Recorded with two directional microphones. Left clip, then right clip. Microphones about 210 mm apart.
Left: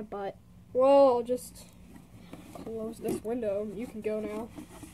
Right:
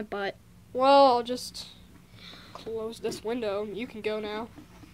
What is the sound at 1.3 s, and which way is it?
Speech, centre (ahead or behind).